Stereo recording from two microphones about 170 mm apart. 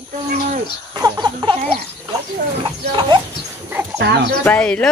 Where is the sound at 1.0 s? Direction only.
25° right (ahead or behind).